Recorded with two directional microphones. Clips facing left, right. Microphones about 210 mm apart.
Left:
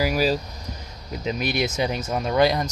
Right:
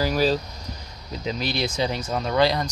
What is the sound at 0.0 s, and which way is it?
Speech, 10° left (ahead or behind).